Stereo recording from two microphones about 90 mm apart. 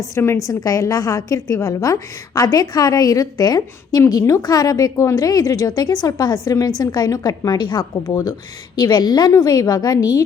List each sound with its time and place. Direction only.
0.4 s a woman's voice: 40° left (ahead or behind); by 8.1 s 55° left (ahead or behind)
8.1 s a woman's voice: 45° left (ahead or behind)